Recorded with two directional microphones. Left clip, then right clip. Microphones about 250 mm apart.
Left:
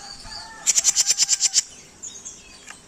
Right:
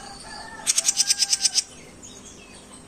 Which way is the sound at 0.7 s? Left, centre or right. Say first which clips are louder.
Left 2 dB; centre.